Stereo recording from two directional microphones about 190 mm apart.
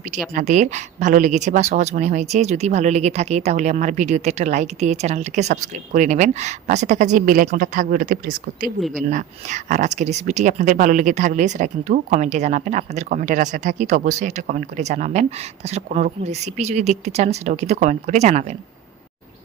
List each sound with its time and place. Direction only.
0.3 s speech: 40° right (ahead or behind)